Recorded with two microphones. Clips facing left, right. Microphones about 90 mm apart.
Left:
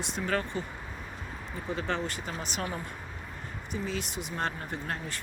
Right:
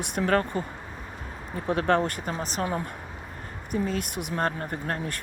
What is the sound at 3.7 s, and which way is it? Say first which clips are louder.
Speech: right 7 dB; 50° right (ahead or behind).